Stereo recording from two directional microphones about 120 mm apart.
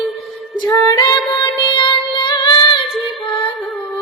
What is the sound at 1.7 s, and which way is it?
Child singing, 40° left (ahead or behind).